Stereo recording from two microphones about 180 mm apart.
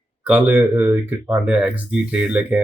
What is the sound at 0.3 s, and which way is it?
Speech, 10° right (ahead or behind).